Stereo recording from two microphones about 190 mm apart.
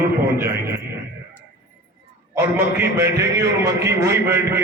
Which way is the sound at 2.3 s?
15° right (ahead or behind).